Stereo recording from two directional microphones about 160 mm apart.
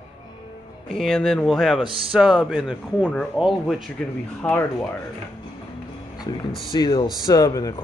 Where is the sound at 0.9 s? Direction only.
Centre (ahead or behind).